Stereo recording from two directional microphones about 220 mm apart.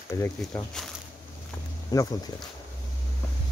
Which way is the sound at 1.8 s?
15° left (ahead or behind).